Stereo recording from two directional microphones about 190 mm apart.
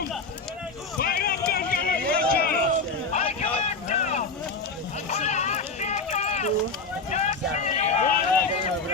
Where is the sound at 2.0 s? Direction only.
5° left (ahead or behind).